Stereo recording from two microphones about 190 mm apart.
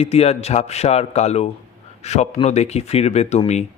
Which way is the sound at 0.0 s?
35° left (ahead or behind).